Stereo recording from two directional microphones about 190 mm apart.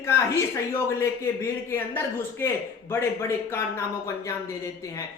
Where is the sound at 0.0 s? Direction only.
15° left (ahead or behind).